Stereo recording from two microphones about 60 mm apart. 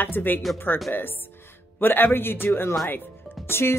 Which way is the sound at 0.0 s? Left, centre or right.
Left.